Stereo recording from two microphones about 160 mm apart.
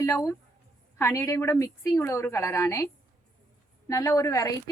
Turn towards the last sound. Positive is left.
turn(degrees=20)  # may be behind; listen again after turning